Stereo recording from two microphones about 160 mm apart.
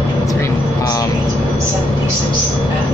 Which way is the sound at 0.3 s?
20° left (ahead or behind).